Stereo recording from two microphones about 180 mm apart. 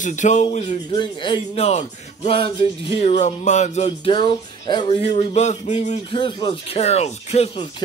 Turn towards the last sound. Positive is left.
turn(degrees=35)  # may be behind; listen again after turning